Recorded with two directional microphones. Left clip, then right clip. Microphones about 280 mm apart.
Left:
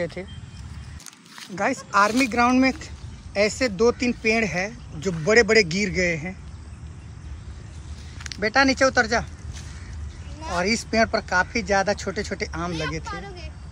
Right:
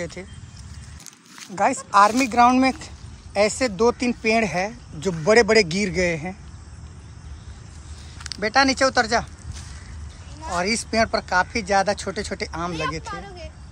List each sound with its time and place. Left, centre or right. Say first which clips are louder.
0.0 s speech: left 3 dB; centre
1.5 s speech: right 4 dB; centre
8.2 s speech: right 1 dB; centre
10.4 s speech: even; centre
13.1 s speech: right 1 dB; right